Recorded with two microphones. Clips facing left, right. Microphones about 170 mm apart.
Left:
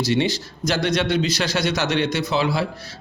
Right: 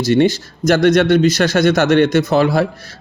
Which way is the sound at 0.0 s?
50° right (ahead or behind).